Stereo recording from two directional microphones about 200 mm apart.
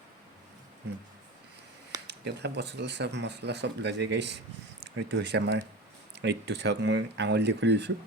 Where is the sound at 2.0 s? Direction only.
60° right (ahead or behind).